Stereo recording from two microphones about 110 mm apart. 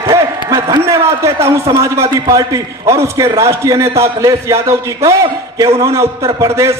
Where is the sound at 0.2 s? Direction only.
35° right (ahead or behind).